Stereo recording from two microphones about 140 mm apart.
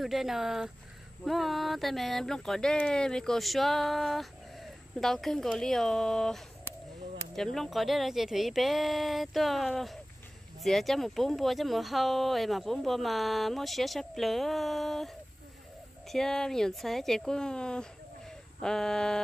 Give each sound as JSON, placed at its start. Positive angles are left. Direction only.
{"t": 0.0, "sound": "speech", "side_deg": 0}